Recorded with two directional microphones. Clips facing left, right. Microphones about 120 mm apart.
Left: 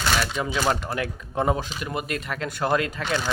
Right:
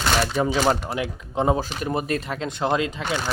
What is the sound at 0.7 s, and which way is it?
Speech, 20° right (ahead or behind).